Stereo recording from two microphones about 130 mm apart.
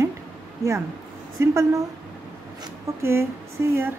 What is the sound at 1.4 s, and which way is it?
Speech, 20° right (ahead or behind).